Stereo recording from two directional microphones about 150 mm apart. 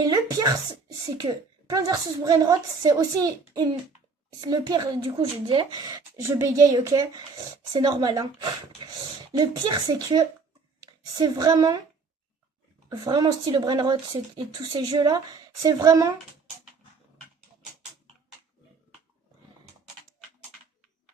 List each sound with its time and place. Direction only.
0.0 s a woman's voice: 25° right (ahead or behind)
12.9 s a woman's voice: 25° right (ahead or behind)